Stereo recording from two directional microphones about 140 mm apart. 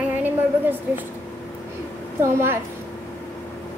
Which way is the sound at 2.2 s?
20° right (ahead or behind).